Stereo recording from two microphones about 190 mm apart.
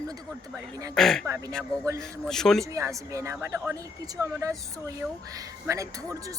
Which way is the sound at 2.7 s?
15° right (ahead or behind).